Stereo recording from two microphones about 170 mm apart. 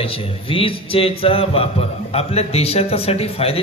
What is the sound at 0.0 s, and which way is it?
A man's voice, 35° left (ahead or behind).